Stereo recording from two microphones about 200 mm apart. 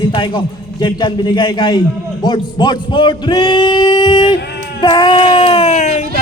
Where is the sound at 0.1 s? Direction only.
25° left (ahead or behind).